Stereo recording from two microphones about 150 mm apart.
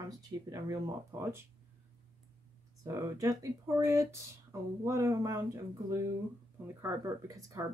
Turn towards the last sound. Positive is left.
turn(degrees=-20)  # may be behind; listen again after turning